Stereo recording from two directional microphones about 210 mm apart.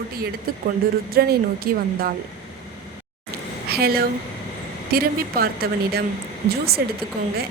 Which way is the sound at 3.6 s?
45° right (ahead or behind).